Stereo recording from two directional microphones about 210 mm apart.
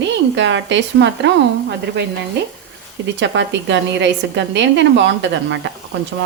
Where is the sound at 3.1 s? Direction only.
60° right (ahead or behind).